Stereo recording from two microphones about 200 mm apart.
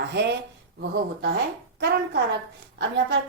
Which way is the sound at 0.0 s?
55° right (ahead or behind).